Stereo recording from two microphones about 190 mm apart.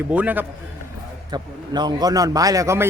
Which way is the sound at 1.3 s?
20° right (ahead or behind).